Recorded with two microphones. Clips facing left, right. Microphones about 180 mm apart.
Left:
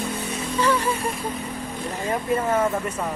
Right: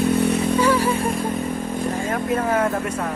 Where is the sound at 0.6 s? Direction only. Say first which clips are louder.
Right 1 dB; 10° right (ahead or behind).